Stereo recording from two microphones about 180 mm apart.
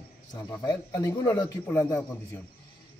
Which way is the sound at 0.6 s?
20° left (ahead or behind).